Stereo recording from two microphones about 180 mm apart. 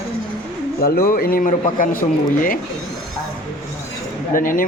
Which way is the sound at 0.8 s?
55° left (ahead or behind).